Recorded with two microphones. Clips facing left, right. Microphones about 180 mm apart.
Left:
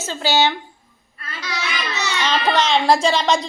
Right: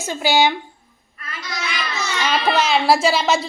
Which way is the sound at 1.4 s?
75° left (ahead or behind).